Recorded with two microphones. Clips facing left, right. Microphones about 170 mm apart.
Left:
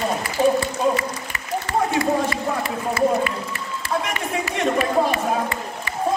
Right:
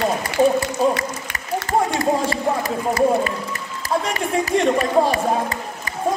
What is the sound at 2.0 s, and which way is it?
Speech, 40° right (ahead or behind).